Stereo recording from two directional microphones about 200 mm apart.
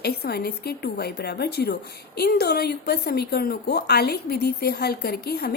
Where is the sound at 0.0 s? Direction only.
50° left (ahead or behind).